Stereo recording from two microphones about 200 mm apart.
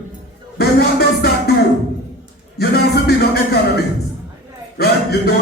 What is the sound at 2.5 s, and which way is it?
Music, 55° left (ahead or behind).